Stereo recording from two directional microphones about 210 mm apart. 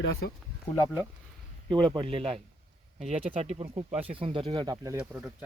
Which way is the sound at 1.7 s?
25° right (ahead or behind).